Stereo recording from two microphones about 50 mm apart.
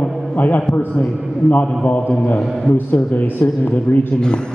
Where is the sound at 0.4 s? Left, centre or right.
Left.